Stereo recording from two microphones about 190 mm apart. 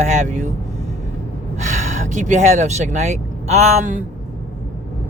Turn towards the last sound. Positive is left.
turn(degrees=-40)  # may be behind; listen again after turning